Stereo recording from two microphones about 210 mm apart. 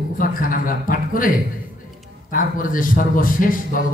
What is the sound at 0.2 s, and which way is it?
A man's voice, 40° left (ahead or behind).